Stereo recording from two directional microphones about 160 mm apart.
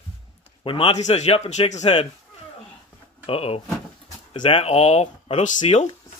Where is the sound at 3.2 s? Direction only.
40° left (ahead or behind).